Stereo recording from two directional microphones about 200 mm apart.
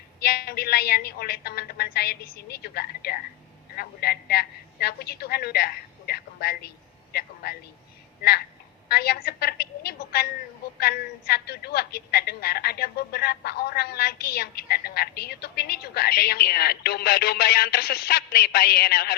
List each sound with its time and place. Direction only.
0.2 s a woman's voice: 55° left (ahead or behind)